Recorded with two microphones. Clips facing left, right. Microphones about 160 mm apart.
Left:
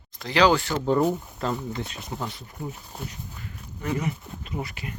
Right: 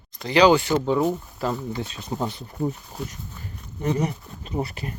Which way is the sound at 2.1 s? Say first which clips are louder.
Right 7 dB; 30° right (ahead or behind).